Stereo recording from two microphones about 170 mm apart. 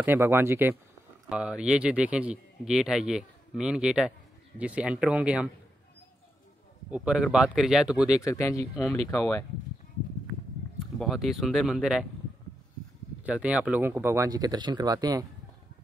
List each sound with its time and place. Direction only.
0.0 s a man's voice: 15° right (ahead or behind)
6.9 s a man's voice: 5° right (ahead or behind)
8.2 s speech: 20° left (ahead or behind)
10.6 s a sound: 10° left (ahead or behind)
11.0 s a man's voice: centre (ahead or behind)
13.2 s speech: 5° right (ahead or behind)